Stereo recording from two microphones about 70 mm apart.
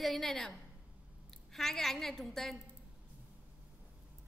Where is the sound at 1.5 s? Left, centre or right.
Centre.